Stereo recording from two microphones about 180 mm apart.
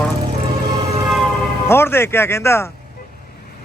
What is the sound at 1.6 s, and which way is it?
Speech, 15° left (ahead or behind).